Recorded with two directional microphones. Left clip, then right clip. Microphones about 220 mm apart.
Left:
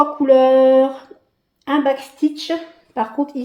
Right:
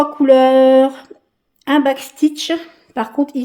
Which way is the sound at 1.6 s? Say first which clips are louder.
Right 3 dB; 35° right (ahead or behind).